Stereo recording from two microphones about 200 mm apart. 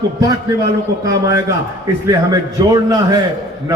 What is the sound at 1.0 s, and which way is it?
Speech, 15° right (ahead or behind).